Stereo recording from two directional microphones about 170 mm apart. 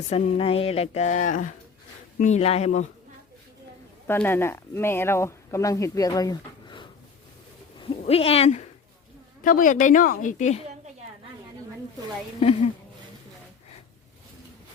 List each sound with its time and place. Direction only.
0.1 s a woman's voice: 35° left (ahead or behind)
4.0 s speech: 15° left (ahead or behind); by 8.6 s 40° left (ahead or behind)
9.4 s a woman's voice: 50° left (ahead or behind)